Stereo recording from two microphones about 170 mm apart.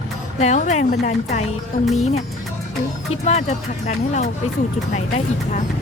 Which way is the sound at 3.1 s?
40° left (ahead or behind).